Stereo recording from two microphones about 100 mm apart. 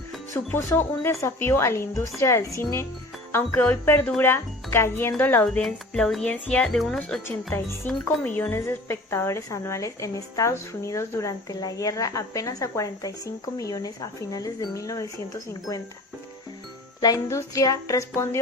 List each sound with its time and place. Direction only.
0.3 s a woman's voice: 25° left (ahead or behind)
5.4 s speech: 5° left (ahead or behind)
7.3 s a woman's voice: 25° left (ahead or behind)
17.2 s a woman's voice: 30° left (ahead or behind)